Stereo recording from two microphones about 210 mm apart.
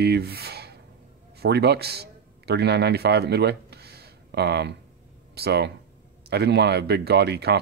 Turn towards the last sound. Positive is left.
turn(degrees=-50)  # may be behind; listen again after turning